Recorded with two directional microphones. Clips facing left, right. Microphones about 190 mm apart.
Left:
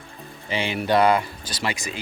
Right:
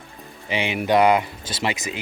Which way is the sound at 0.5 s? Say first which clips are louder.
Right 2 dB; 15° right (ahead or behind).